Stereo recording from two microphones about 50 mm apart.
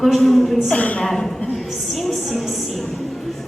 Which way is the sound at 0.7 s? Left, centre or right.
Left.